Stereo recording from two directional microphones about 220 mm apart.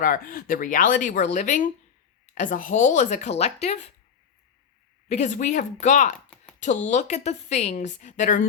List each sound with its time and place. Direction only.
0.0 s a woman's voice: 40° left (ahead or behind)
5.0 s a woman's voice: 30° left (ahead or behind)
6.1 s a sound: 5° left (ahead or behind)
6.6 s a woman's voice: 35° left (ahead or behind)